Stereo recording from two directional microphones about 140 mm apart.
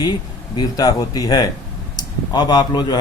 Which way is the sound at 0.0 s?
30° left (ahead or behind).